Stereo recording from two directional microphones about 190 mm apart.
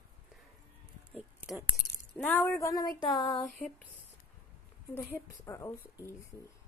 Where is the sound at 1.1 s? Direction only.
5° right (ahead or behind).